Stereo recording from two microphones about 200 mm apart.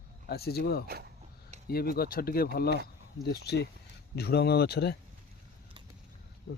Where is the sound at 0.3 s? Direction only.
50° left (ahead or behind).